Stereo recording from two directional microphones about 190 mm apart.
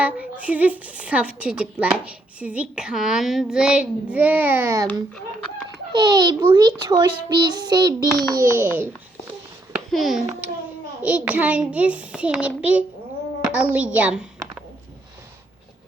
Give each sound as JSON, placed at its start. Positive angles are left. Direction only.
{"t": 0.0, "sound": "a woman's voice", "side_deg": -5}
{"t": 5.9, "sound": "a child's voice", "side_deg": -20}